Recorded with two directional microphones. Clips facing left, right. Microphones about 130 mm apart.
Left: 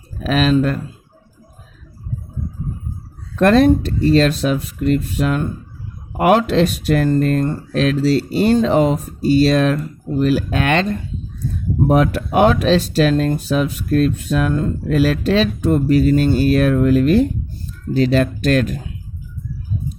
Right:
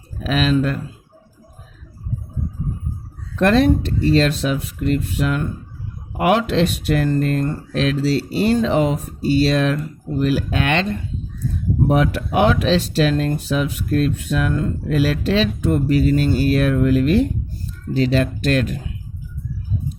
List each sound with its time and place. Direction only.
0.2 s speech: 45° left (ahead or behind)
3.3 s speech: 45° left (ahead or behind)
11.9 s speech: 45° left (ahead or behind)
14.9 s speech: 45° left (ahead or behind)